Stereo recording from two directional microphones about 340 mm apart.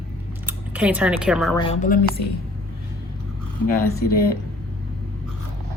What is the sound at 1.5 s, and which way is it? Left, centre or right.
Speech, centre.